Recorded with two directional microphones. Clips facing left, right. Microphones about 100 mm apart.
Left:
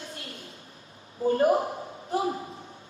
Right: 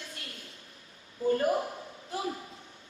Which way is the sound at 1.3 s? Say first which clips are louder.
Left 5 dB; 35° left (ahead or behind).